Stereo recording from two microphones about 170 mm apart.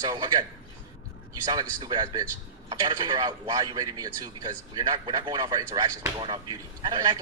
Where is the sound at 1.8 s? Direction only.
25° right (ahead or behind).